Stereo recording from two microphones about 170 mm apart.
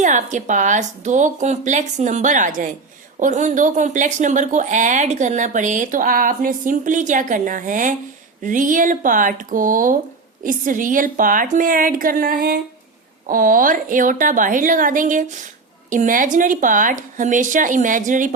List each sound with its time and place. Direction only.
0.0 s speech: 45° right (ahead or behind)